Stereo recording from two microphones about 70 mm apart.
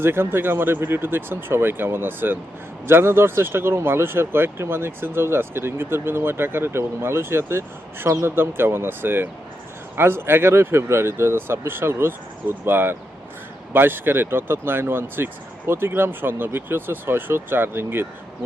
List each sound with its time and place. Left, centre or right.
0.0 s speech: right